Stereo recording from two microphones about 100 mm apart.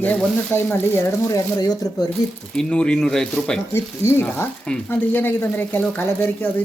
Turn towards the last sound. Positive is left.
turn(degrees=20)  # may be behind; listen again after turning